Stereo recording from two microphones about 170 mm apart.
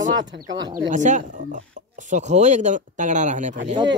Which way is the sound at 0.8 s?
45° right (ahead or behind).